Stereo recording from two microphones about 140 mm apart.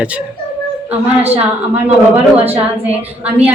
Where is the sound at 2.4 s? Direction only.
15° right (ahead or behind).